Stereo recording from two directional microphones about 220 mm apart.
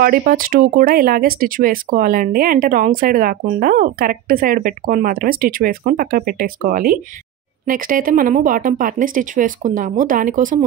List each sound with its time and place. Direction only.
0.0 s speech: 40° right (ahead or behind)